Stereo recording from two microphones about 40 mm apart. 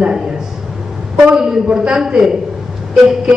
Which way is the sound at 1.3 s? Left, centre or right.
Centre.